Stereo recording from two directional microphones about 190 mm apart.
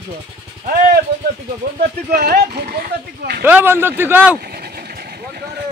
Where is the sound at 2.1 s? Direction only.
55° right (ahead or behind).